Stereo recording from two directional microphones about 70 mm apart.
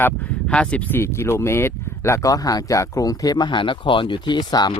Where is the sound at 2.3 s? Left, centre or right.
Left.